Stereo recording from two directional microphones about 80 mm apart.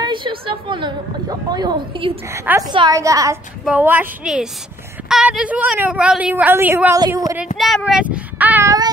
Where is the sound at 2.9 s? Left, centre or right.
Right.